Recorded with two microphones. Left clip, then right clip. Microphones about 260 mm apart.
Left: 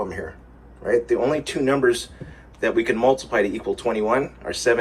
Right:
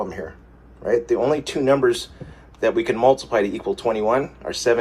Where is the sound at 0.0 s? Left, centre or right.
Centre.